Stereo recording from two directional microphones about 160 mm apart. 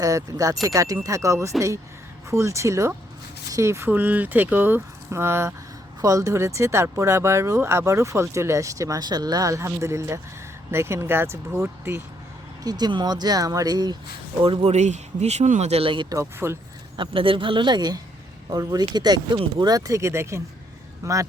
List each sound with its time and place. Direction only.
0.0 s speech: 20° right (ahead or behind)
12.6 s speech: 25° right (ahead or behind)
14.4 s speech: 35° right (ahead or behind); by 16.6 s 15° right (ahead or behind)
17.0 s speech: 30° right (ahead or behind)